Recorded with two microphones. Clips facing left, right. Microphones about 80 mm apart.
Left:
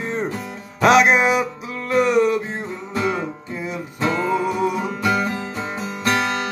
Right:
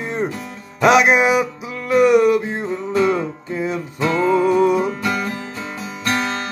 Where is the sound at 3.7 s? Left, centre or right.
Centre.